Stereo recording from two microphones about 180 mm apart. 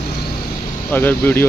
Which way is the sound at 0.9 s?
10° left (ahead or behind).